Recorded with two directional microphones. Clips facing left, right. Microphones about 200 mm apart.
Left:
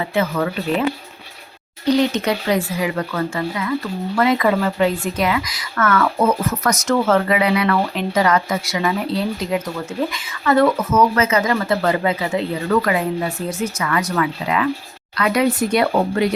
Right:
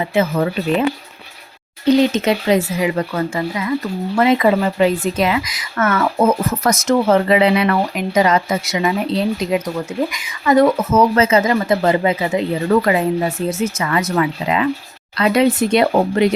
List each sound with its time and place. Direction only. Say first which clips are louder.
0.0 s a woman's voice: right 3 dB; 20° right (ahead or behind)
1.9 s a woman's voice: right 3 dB; 20° right (ahead or behind)
10.9 s a woman's voice: right 3 dB; 30° right (ahead or behind)